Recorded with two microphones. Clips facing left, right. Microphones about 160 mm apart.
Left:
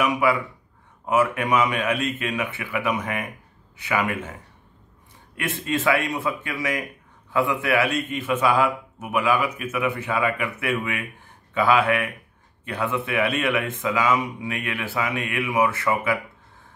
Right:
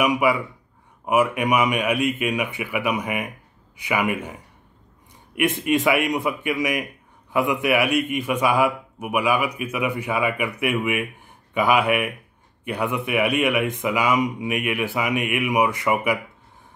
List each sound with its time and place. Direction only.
0.0 s speech: 15° right (ahead or behind)